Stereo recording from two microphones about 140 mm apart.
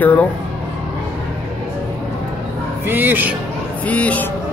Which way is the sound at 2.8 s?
15° right (ahead or behind).